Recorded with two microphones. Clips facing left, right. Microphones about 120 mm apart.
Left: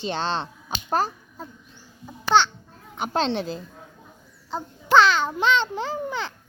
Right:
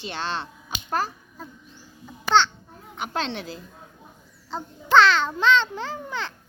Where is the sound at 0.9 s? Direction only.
25° left (ahead or behind).